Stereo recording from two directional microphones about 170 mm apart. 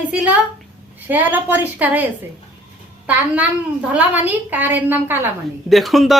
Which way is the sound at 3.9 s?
10° right (ahead or behind).